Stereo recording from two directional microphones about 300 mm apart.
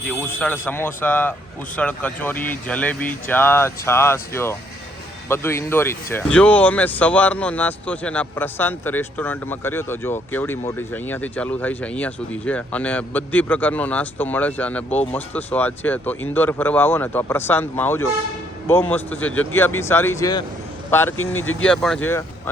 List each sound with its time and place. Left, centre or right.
0.1 s speech: centre
21.2 s speech: left
21.6 s speech: centre